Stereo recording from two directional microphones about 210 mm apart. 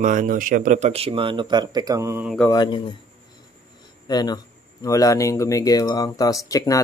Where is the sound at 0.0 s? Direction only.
40° right (ahead or behind); by 2.2 s 15° right (ahead or behind).